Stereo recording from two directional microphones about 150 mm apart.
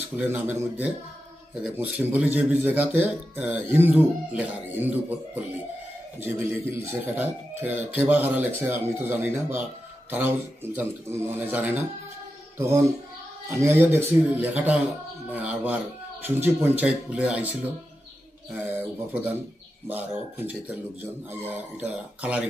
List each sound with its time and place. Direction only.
0.2 s a man's voice: 10° right (ahead or behind)
18.7 s a man's voice: 15° right (ahead or behind)
20.6 s a man's voice: 15° right (ahead or behind)